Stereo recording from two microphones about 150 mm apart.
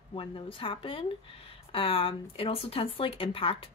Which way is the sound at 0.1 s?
35° left (ahead or behind).